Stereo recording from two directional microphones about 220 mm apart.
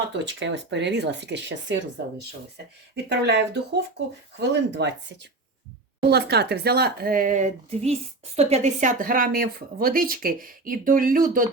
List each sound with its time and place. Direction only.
0.3 s speech: 55° right (ahead or behind)
2.9 s speech: 50° right (ahead or behind)